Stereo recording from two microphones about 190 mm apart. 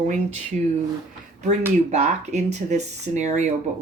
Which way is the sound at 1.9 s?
35° right (ahead or behind).